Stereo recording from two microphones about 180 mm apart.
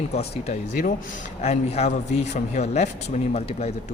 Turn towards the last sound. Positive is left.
turn(degrees=35)  # may be behind; listen again after turning